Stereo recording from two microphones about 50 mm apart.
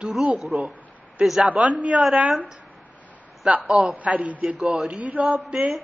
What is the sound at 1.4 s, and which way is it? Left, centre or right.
Speech, right.